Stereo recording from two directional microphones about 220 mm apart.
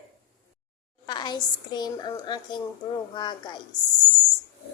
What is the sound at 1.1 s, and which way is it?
A woman's voice, 20° left (ahead or behind).